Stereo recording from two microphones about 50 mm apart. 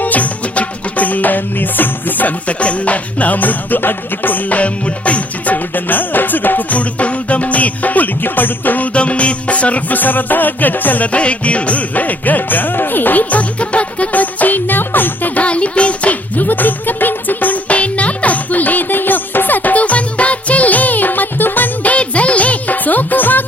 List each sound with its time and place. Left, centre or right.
0.0 s music: left
15.4 s music: left
21.9 s music: left